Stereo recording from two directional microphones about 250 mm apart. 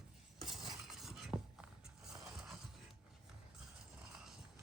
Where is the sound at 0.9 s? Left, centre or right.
Centre.